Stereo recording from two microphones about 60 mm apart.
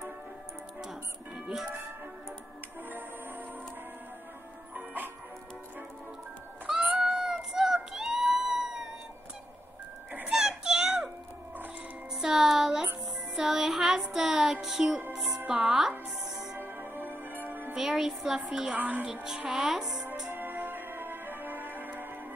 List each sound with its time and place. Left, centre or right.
0.8 s music: centre
4.7 s music: right
7.0 s a sound: centre
10.3 s child singing: centre
12.2 s music: centre
15.4 s a woman's voice: centre
16.5 s music: right
17.7 s a woman's voice: centre
18.8 s speech: right
19.5 s a woman's voice: centre
20.3 s music: right